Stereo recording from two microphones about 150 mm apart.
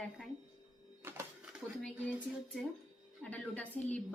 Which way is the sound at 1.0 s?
15° right (ahead or behind).